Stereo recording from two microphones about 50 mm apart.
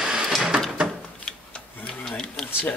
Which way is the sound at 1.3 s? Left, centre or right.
Centre.